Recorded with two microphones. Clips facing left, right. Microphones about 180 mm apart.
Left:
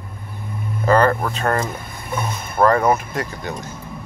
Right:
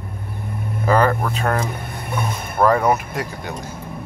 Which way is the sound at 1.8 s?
65° right (ahead or behind).